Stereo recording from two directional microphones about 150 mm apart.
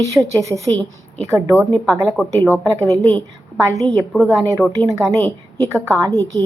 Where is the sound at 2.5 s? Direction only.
20° right (ahead or behind).